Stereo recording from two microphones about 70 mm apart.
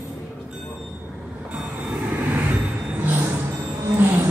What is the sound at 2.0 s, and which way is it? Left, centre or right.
Vehicle, right.